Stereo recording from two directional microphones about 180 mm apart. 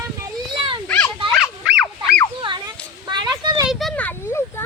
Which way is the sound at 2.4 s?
25° right (ahead or behind).